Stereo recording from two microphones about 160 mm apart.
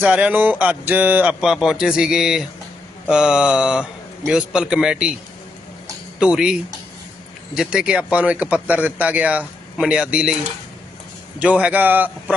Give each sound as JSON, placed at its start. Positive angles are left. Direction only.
{"t": 0.0, "sound": "speech", "side_deg": -10}
{"t": 3.1, "sound": "mantra", "side_deg": -5}
{"t": 6.1, "sound": "mantra", "side_deg": -5}
{"t": 7.5, "sound": "speech", "side_deg": -5}
{"t": 11.3, "sound": "speech", "side_deg": -10}